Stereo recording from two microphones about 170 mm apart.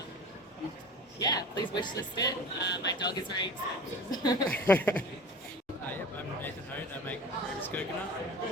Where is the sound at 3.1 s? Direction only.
25° left (ahead or behind).